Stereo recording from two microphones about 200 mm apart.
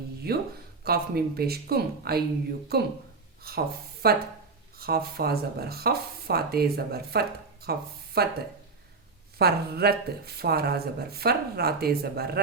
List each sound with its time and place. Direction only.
0.3 s speech: 50° right (ahead or behind)
9.4 s speech: 50° right (ahead or behind)